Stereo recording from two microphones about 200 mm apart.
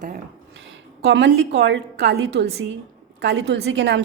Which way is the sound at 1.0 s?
60° right (ahead or behind).